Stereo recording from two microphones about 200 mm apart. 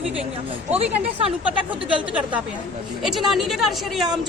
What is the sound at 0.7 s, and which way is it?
Speech, 30° right (ahead or behind).